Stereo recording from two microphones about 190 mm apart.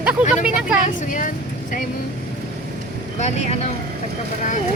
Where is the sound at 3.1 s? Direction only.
35° left (ahead or behind).